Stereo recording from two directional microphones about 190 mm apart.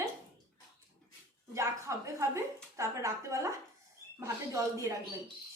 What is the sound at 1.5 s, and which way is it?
A woman's voice, 15° right (ahead or behind).